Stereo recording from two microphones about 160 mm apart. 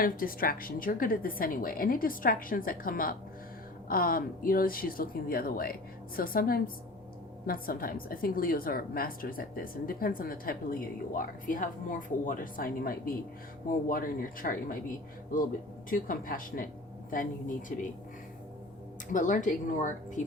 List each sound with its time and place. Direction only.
0.0 s a woman's voice: 65° left (ahead or behind)
15.9 s a woman's voice: 60° left (ahead or behind)
19.1 s speech: 55° left (ahead or behind)